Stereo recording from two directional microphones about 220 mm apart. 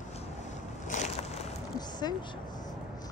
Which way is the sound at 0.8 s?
35° left (ahead or behind).